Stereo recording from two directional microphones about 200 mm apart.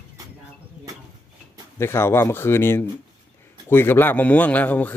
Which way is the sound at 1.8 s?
10° left (ahead or behind).